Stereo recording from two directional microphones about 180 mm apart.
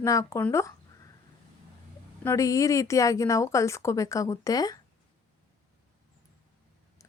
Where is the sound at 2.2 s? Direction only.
15° left (ahead or behind).